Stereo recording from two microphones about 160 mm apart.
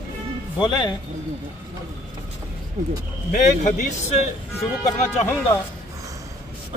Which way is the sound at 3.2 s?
45° left (ahead or behind).